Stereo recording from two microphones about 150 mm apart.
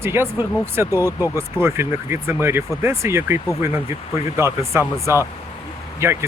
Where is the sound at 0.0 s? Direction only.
15° right (ahead or behind).